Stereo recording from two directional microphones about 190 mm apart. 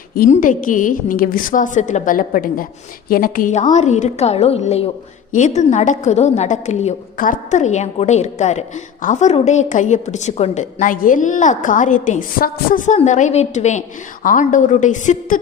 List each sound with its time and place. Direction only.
0.1 s a woman's voice: 50° left (ahead or behind)